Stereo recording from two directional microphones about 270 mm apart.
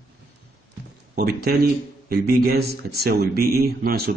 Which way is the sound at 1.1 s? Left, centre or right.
Right.